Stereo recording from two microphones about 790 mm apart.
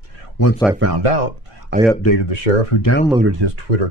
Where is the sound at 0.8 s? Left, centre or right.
Right.